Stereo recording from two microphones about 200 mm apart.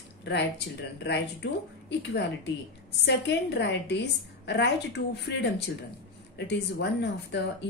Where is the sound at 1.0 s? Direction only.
60° left (ahead or behind).